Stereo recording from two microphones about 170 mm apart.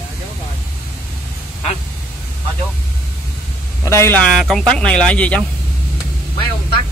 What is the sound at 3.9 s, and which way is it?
Speech, 15° left (ahead or behind).